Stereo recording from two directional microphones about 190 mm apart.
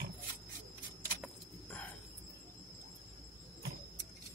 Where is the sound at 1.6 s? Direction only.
10° left (ahead or behind).